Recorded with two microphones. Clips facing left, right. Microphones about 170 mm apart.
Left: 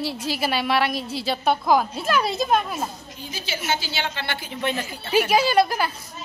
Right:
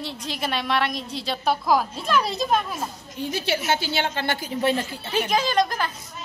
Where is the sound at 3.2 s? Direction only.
65° right (ahead or behind); by 4.9 s 35° right (ahead or behind).